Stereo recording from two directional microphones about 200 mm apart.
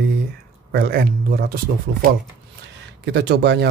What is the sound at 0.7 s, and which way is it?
Speech, 50° right (ahead or behind).